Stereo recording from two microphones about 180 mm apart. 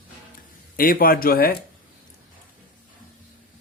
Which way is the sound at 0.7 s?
50° left (ahead or behind).